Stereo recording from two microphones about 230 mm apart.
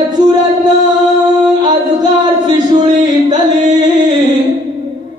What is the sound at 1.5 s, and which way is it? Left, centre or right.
Singing, centre.